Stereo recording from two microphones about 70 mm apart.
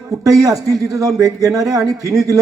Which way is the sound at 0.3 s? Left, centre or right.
Right.